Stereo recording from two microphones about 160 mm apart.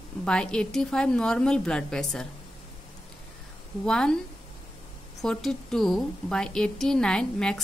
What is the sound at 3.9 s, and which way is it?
Speech, 5° left (ahead or behind).